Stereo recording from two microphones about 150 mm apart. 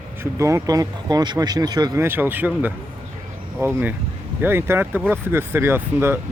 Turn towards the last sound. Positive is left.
turn(degrees=-15)  # may be behind; listen again after turning